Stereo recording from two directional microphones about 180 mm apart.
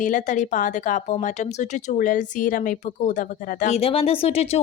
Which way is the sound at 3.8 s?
30° left (ahead or behind).